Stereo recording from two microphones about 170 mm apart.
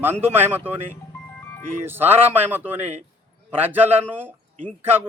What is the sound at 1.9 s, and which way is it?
Speech, 10° right (ahead or behind).